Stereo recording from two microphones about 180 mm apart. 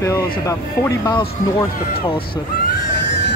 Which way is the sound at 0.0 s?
20° left (ahead or behind).